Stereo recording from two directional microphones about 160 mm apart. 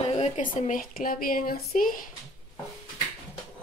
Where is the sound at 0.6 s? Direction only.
60° left (ahead or behind).